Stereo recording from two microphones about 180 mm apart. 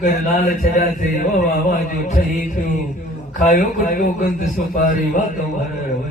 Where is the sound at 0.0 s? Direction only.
55° left (ahead or behind).